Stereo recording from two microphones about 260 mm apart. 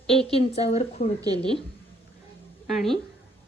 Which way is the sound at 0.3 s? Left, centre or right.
Left.